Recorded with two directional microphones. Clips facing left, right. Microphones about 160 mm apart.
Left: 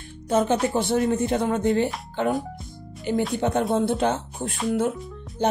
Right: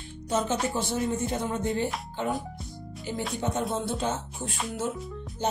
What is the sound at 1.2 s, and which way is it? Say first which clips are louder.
Speech: left 7 dB; 70° left (ahead or behind).